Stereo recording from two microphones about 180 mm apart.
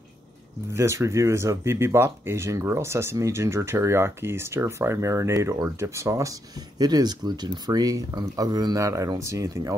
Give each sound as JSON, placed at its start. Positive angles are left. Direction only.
{"t": 0.7, "sound": "speech", "side_deg": -15}